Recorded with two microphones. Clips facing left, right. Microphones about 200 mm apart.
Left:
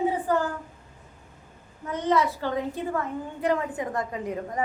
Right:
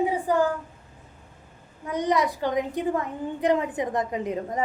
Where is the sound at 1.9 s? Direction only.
15° right (ahead or behind).